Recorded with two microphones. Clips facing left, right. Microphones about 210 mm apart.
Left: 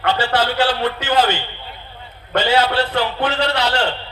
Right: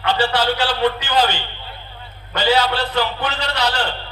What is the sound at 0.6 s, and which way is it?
Speech, 25° left (ahead or behind).